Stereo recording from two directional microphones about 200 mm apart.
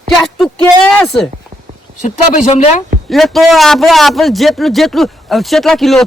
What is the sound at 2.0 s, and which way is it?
Speech, 35° left (ahead or behind).